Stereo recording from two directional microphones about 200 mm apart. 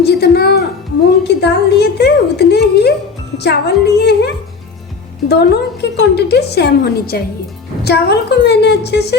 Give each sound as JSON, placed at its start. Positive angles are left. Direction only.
{"t": 0.0, "sound": "a woman's voice", "side_deg": 55}
{"t": 5.3, "sound": "a woman's voice", "side_deg": 55}